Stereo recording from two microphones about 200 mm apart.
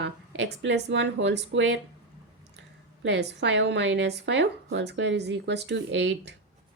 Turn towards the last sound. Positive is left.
turn(degrees=-60)  # may be behind; listen again after turning